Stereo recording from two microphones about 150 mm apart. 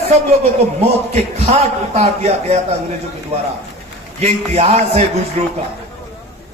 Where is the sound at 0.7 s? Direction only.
45° right (ahead or behind).